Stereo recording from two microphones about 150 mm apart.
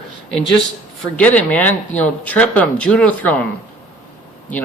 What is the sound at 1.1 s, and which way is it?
Speech, 10° left (ahead or behind).